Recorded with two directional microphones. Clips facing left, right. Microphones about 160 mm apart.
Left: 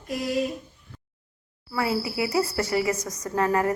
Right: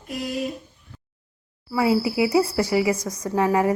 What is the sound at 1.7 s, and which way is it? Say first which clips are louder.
A woman's voice: right 6 dB; 15° right (ahead or behind).